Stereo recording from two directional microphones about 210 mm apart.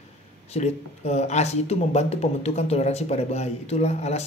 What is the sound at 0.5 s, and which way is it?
Speech, 30° left (ahead or behind).